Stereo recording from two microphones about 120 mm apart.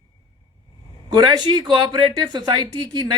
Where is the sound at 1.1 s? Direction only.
35° right (ahead or behind).